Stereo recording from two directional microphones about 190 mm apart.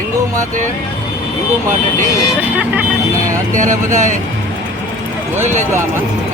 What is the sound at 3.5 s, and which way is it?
Speech, 40° right (ahead or behind).